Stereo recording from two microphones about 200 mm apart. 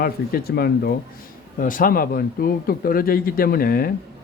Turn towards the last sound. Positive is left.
turn(degrees=50)  # may be behind; listen again after turning